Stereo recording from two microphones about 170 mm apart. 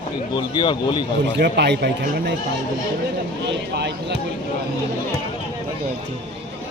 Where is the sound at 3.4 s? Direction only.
90° right.